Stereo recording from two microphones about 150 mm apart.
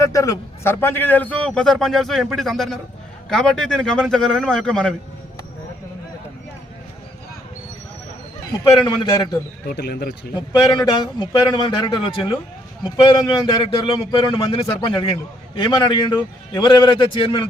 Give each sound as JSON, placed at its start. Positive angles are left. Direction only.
{"t": 0.0, "sound": "a man's voice", "side_deg": 20}
{"t": 8.9, "sound": "a man's voice", "side_deg": 25}
{"t": 9.6, "sound": "speech", "side_deg": 90}
{"t": 10.3, "sound": "a man's voice", "side_deg": 30}